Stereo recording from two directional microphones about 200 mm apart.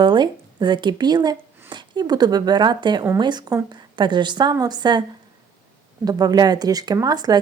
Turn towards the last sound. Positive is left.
turn(degrees=-20)  # may be behind; listen again after turning